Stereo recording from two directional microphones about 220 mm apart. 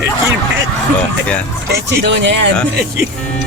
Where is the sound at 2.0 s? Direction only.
55° right (ahead or behind).